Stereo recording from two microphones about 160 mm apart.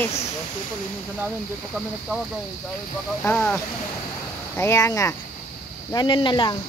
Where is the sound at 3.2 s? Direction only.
10° left (ahead or behind); by 6.5 s 30° left (ahead or behind).